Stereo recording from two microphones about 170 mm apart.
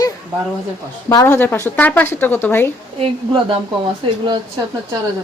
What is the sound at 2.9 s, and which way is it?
Speech, 30° right (ahead or behind).